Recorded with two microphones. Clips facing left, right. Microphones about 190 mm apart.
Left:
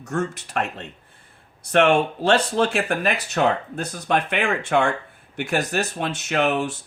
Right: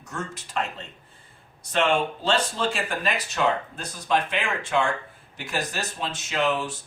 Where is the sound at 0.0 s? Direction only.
65° left (ahead or behind).